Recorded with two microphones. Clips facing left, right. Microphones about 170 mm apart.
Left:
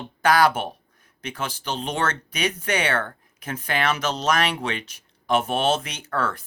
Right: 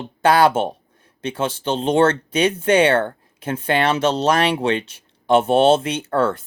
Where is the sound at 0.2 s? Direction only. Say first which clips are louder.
Right 4 dB; 25° right (ahead or behind).